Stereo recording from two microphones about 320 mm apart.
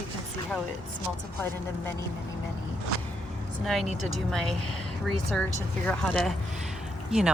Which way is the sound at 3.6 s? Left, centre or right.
Centre.